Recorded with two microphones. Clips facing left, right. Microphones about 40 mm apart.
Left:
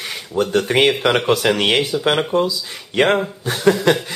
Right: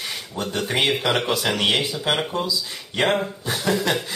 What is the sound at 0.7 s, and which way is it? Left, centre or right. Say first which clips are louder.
Speech: left 3 dB; left.